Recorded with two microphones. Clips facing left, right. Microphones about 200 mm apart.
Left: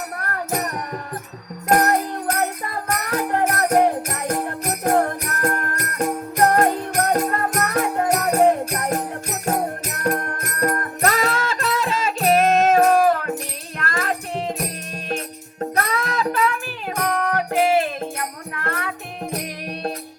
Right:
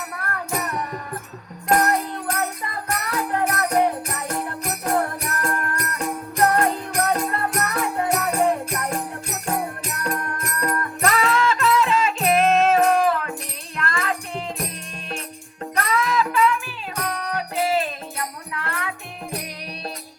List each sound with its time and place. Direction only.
0.2 s music: 40° left (ahead or behind)
15.7 s music: 40° left (ahead or behind)
16.9 s music: 50° left (ahead or behind)
18.6 s music: 45° left (ahead or behind)